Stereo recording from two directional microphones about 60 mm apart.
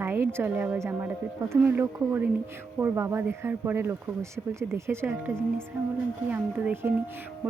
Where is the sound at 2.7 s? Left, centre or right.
Right.